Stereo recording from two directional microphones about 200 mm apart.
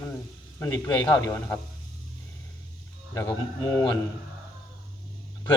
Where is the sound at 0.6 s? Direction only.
15° left (ahead or behind).